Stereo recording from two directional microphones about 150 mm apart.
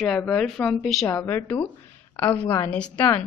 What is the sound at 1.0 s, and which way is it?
Speech, 15° left (ahead or behind).